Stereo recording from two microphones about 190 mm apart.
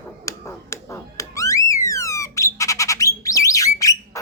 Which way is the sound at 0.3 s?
15° left (ahead or behind).